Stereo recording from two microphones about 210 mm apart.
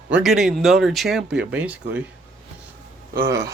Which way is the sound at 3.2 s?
15° right (ahead or behind).